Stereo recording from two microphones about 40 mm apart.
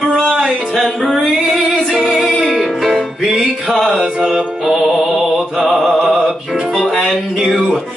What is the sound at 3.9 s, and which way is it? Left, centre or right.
Music, centre.